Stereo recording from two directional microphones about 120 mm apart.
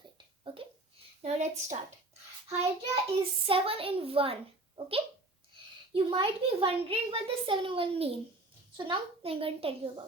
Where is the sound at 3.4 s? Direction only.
50° right (ahead or behind).